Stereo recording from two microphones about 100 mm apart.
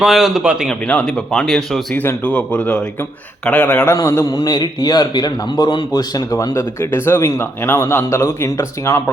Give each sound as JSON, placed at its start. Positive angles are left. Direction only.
{"t": 0.0, "sound": "a man's voice", "side_deg": -5}
{"t": 0.7, "sound": "speech", "side_deg": 10}
{"t": 2.0, "sound": "speech", "side_deg": 15}
{"t": 3.8, "sound": "a man's voice", "side_deg": 30}
{"t": 4.4, "sound": "a man's voice", "side_deg": 45}